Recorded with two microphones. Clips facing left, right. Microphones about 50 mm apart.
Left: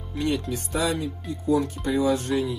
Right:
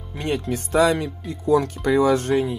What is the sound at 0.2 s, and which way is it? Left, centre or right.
Speech, right.